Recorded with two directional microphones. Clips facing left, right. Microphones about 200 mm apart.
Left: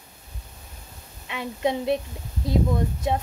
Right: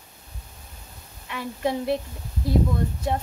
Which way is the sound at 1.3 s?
20° left (ahead or behind).